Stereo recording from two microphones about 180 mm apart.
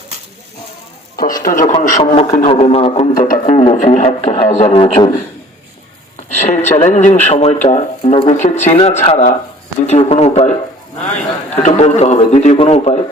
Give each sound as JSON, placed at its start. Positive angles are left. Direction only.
{"t": 1.4, "sound": "speech", "side_deg": 45}
{"t": 3.2, "sound": "speech", "side_deg": 50}
{"t": 6.3, "sound": "a sound", "side_deg": 40}
{"t": 6.7, "sound": "speech", "side_deg": 35}